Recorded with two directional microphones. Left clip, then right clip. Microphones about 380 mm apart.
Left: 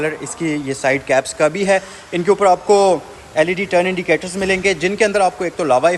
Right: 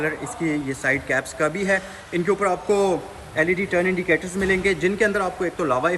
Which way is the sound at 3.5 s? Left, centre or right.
Left.